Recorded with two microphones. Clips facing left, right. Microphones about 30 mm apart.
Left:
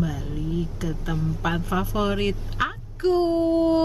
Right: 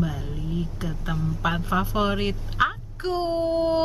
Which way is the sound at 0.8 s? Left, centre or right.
Right.